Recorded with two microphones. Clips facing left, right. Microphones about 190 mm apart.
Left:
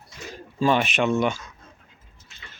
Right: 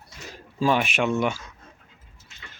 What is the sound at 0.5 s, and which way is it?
Speech, 5° right (ahead or behind).